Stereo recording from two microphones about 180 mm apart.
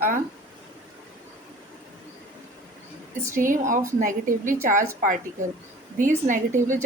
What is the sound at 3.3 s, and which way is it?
Speech, 45° right (ahead or behind).